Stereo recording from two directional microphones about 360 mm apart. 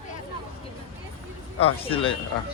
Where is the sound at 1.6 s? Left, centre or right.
Centre.